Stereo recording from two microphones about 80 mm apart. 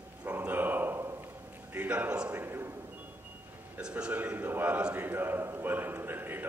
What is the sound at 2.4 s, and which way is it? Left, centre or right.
Speech, right.